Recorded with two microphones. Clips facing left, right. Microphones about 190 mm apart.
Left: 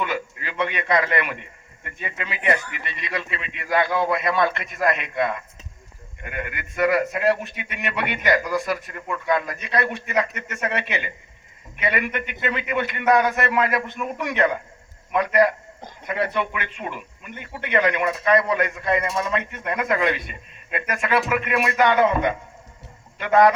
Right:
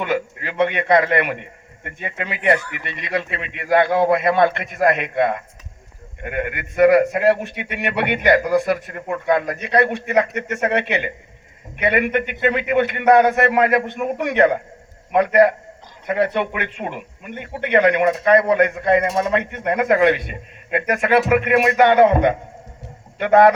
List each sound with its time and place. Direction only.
0.0 s a man's voice: 55° right (ahead or behind)